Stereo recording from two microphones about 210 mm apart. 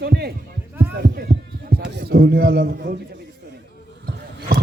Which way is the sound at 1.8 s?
50° right (ahead or behind).